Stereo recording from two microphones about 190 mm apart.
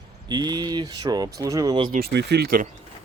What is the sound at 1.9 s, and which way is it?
Speech, 60° right (ahead or behind).